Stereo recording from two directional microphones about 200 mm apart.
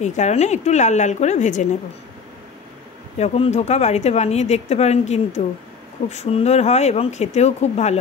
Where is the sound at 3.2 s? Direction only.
30° left (ahead or behind).